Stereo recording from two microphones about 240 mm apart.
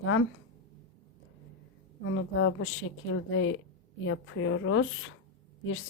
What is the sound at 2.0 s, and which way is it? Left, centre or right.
A woman's voice, left.